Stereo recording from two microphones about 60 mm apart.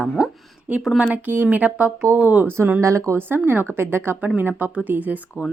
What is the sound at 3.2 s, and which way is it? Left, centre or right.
A woman's voice, right.